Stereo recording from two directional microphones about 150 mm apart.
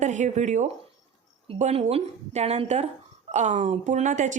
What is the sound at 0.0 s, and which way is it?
A woman's voice, 55° right (ahead or behind).